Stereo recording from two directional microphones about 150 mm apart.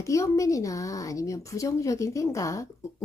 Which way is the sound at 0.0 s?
20° left (ahead or behind).